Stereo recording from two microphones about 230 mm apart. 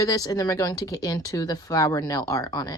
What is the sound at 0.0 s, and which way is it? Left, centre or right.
Speech, centre.